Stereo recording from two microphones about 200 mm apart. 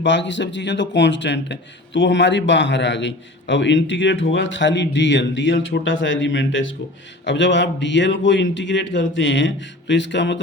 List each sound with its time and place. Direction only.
0.0 s speech: 65° left (ahead or behind)